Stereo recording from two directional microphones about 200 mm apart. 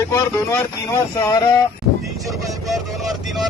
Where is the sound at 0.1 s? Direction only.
15° left (ahead or behind).